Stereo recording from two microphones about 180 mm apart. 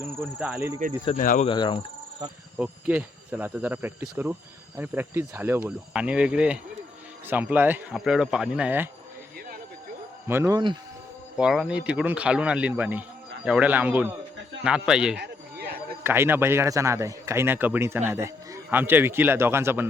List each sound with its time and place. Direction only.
0.0 s a man's voice: 10° right (ahead or behind)
1.2 s speech: 50° left (ahead or behind)
1.5 s speech: 25° left (ahead or behind)
2.6 s a man's voice: 10° right (ahead or behind)
10.2 s a man's voice: 15° right (ahead or behind)
15.2 s a sound: 60° right (ahead or behind)
16.0 s a man's voice: 15° right (ahead or behind)